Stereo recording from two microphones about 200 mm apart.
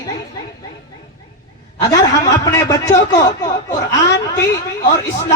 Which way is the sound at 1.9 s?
20° left (ahead or behind).